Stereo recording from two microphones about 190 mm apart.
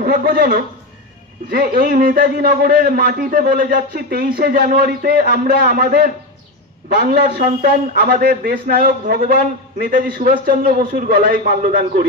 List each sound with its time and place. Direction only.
0.0 s a man's voice: 55° right (ahead or behind)